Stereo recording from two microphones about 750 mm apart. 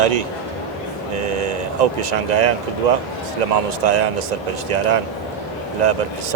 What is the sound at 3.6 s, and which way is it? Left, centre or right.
Speech, right.